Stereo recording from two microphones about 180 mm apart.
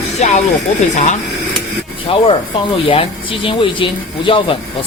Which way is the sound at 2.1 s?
30° left (ahead or behind).